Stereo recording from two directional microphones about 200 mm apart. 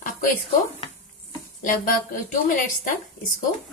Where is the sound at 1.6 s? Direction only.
40° left (ahead or behind).